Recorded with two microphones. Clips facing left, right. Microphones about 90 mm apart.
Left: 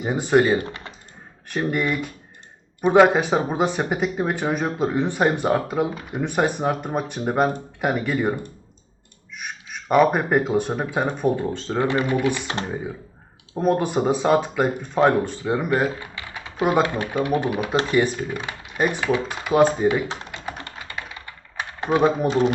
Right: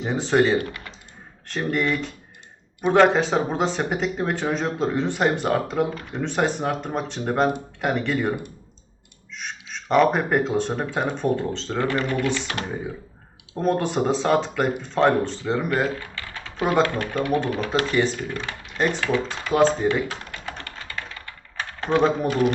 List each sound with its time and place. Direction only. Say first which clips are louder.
0.0 s speech: left 2 dB; 10° left (ahead or behind)
13.6 s speech: left 2 dB; 10° left (ahead or behind)
20.1 s speech: left 1 dB; 25° left (ahead or behind)
20.4 s typing: left 2 dB; 10° left (ahead or behind)
22.3 s speech: left 1 dB; 25° left (ahead or behind)